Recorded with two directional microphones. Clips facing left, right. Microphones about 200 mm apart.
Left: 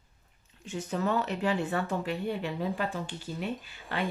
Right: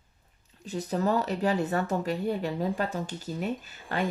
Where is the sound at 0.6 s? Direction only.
35° right (ahead or behind).